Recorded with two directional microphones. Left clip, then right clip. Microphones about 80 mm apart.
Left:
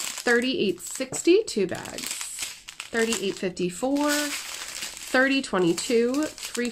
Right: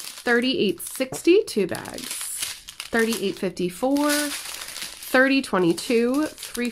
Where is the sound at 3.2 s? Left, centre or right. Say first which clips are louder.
Right 2 dB; right.